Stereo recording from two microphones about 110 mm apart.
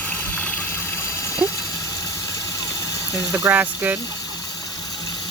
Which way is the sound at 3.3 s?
20° right (ahead or behind).